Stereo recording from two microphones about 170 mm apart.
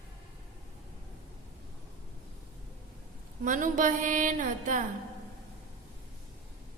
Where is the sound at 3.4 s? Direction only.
50° right (ahead or behind).